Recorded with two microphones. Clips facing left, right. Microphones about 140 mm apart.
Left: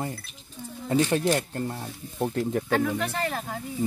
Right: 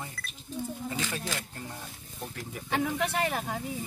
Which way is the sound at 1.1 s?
50° left (ahead or behind).